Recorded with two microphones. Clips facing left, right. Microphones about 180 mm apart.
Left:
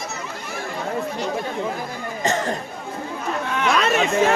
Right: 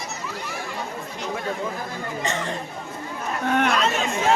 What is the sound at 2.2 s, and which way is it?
Speech, 40° left (ahead or behind).